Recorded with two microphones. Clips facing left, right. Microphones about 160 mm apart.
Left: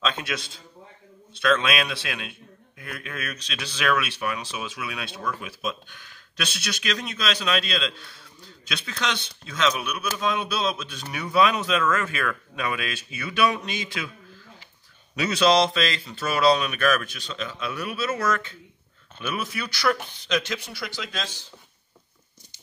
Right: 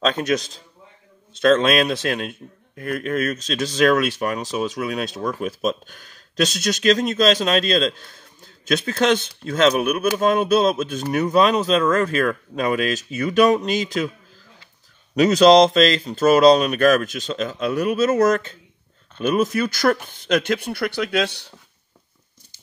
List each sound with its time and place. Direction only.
0.0 s a man's voice: 40° right (ahead or behind)
15.1 s a man's voice: 40° right (ahead or behind); by 21.5 s 65° right (ahead or behind)